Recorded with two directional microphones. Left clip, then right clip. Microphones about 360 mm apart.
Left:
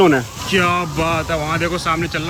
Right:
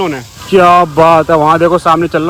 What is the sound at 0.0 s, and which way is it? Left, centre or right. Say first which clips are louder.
Speech: left 3 dB; centre.